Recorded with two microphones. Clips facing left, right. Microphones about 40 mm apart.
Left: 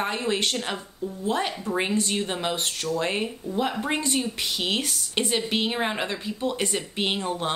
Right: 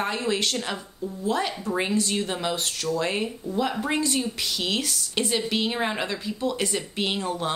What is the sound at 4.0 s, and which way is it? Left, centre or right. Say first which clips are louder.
A woman's voice: right 1 dB; left.